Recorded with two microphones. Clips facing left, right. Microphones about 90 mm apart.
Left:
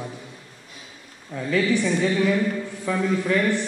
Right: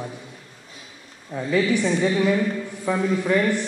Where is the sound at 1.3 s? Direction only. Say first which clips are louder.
Right 1 dB; 20° right (ahead or behind).